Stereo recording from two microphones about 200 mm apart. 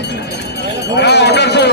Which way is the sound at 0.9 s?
55° left (ahead or behind).